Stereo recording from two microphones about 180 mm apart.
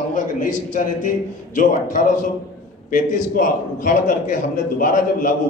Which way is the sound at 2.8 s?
50° left (ahead or behind).